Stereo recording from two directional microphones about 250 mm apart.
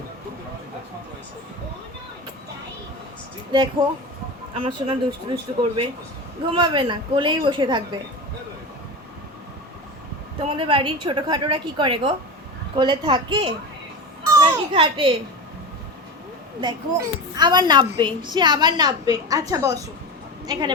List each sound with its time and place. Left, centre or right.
3.5 s a child's voice: centre
6.6 s a woman's voice: centre
10.4 s a woman's voice: right
16.6 s a child's voice: centre